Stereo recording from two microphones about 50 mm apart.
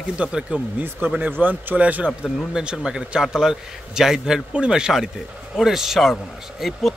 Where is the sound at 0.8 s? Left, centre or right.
Right.